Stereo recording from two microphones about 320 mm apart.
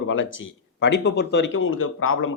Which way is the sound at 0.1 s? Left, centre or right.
Left.